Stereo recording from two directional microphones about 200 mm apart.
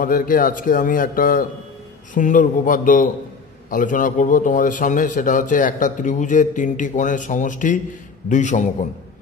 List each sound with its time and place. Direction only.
0.0 s a man's voice: 45° left (ahead or behind)